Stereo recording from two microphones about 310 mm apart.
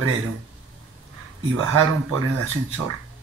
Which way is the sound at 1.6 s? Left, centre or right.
Right.